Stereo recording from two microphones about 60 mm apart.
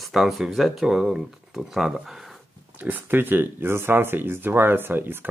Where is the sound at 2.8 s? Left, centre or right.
Right.